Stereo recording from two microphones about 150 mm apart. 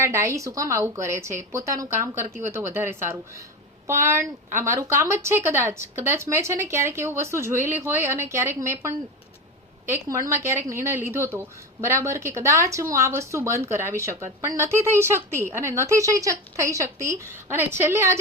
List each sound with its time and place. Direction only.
0.0 s a woman's voice: 20° right (ahead or behind)
9.9 s a woman's voice: 20° right (ahead or behind)